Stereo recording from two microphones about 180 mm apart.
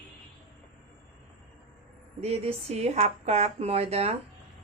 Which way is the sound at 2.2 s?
35° right (ahead or behind).